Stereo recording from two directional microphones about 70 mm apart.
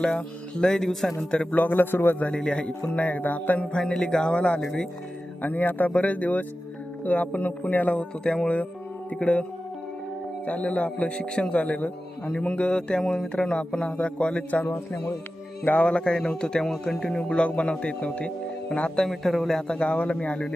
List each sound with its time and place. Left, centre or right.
0.0 s a man's voice: centre
1.3 s a man's voice: centre
5.4 s a man's voice: left